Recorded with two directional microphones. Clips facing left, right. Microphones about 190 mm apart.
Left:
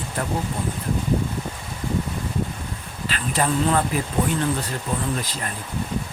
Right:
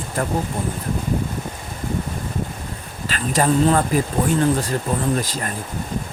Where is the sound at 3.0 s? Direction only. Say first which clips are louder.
Right 4 dB; 45° right (ahead or behind).